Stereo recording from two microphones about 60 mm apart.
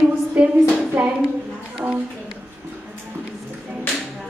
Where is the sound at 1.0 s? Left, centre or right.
Right.